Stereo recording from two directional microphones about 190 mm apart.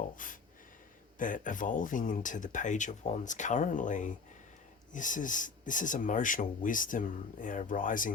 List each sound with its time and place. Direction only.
0.2 s speech: 45° left (ahead or behind)